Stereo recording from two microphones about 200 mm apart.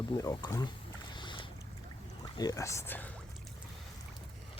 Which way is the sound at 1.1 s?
25° left (ahead or behind).